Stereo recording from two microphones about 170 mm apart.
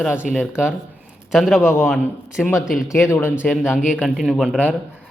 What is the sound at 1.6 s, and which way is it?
Speech, 15° left (ahead or behind).